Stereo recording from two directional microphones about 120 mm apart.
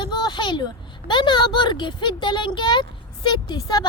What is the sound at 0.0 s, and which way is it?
A woman's voice, 40° left (ahead or behind).